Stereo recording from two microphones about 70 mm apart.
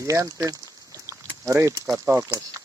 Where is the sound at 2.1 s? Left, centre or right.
Right.